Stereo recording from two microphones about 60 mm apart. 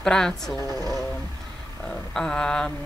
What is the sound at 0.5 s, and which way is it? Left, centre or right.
Speech, right.